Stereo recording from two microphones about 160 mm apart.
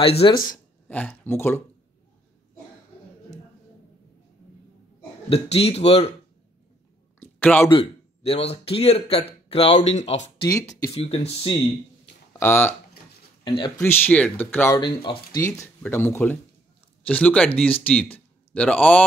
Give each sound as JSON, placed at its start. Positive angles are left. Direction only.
{"t": 0.0, "sound": "speech", "side_deg": 35}
{"t": 0.8, "sound": "speech", "side_deg": 10}
{"t": 5.3, "sound": "speech", "side_deg": 40}
{"t": 7.2, "sound": "a sound", "side_deg": 10}
{"t": 7.7, "sound": "speech", "side_deg": 40}
{"t": 10.4, "sound": "speech", "side_deg": 20}
{"t": 10.9, "sound": "speech", "side_deg": 35}
{"t": 12.4, "sound": "speech", "side_deg": 10}
{"t": 13.4, "sound": "a sound", "side_deg": 30}
{"t": 13.7, "sound": "speech", "side_deg": 10}
{"t": 14.8, "sound": "speech", "side_deg": 30}
{"t": 15.4, "sound": "speech", "side_deg": 15}